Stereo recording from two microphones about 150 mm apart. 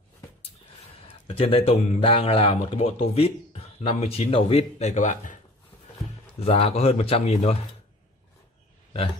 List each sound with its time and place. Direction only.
1.0 s speech: 40° left (ahead or behind); by 5.4 s 60° left (ahead or behind)
6.4 s speech: 40° left (ahead or behind)